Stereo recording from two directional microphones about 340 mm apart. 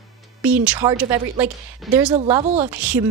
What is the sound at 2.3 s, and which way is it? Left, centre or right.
Speech, centre.